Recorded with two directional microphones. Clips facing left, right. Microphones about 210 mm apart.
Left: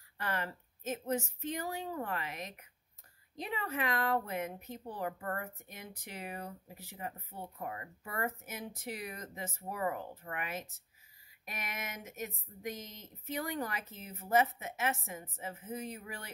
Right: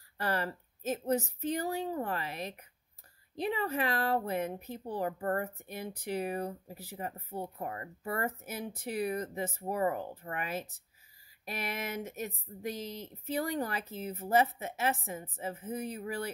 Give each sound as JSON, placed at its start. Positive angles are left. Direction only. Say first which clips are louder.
{"t": 0.2, "sound": "speech", "louder": "right 5 dB", "side_deg": -35}